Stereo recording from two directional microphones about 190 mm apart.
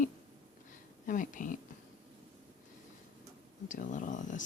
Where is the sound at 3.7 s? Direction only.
40° left (ahead or behind).